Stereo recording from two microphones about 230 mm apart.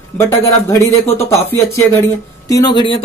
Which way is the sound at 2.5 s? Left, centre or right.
Centre.